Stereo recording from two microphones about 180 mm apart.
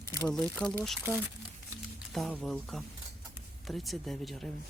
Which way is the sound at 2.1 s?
Centre (ahead or behind).